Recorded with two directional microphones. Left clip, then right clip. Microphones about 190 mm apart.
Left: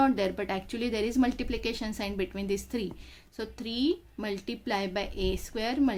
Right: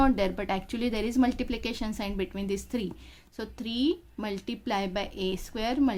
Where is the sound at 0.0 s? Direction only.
25° right (ahead or behind).